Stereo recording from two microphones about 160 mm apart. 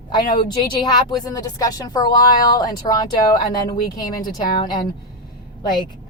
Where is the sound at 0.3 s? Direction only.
25° left (ahead or behind).